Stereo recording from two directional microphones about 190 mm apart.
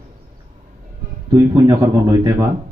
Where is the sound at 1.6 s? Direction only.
20° right (ahead or behind).